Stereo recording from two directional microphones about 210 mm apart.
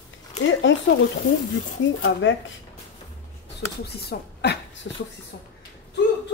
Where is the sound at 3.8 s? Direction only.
50° left (ahead or behind).